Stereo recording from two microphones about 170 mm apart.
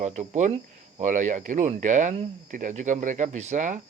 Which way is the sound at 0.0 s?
45° right (ahead or behind).